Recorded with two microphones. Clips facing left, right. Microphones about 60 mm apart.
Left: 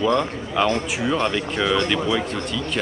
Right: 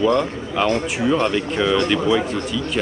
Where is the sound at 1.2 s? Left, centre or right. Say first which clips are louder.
Right 3 dB; centre.